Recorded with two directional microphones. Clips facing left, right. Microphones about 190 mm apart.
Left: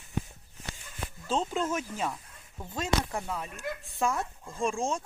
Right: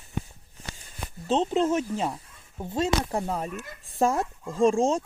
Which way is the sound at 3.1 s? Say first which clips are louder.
Right 6 dB; 40° right (ahead or behind).